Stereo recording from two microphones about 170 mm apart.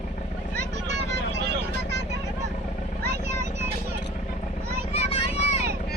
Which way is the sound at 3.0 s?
70° right (ahead or behind).